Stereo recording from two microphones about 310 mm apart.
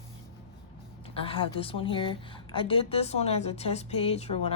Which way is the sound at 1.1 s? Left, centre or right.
Centre.